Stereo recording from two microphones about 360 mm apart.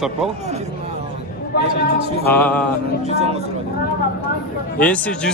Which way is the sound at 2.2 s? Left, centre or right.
Centre.